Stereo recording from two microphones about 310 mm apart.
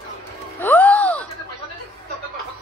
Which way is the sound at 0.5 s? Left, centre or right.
Centre.